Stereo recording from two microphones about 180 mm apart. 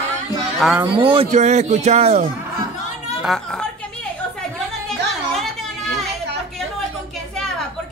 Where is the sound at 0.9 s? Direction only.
30° right (ahead or behind).